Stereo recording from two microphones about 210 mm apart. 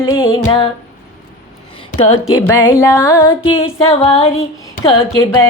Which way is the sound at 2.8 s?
15° left (ahead or behind).